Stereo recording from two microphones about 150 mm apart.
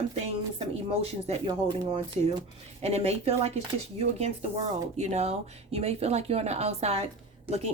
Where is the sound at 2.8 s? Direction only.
45° right (ahead or behind).